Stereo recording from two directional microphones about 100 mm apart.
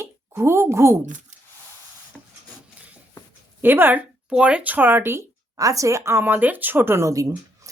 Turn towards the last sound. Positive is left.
turn(degrees=-35)  # may be behind; listen again after turning